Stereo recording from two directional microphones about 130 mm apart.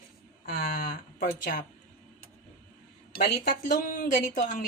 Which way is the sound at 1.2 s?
80° left.